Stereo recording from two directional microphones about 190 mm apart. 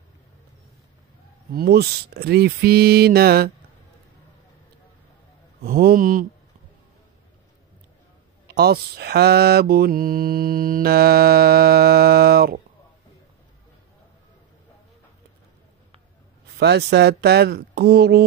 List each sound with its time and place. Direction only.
1.5 s speech: 55° right (ahead or behind)
5.6 s mantra: 50° right (ahead or behind)
8.5 s mantra: 55° right (ahead or behind)
16.5 s speech: 60° right (ahead or behind)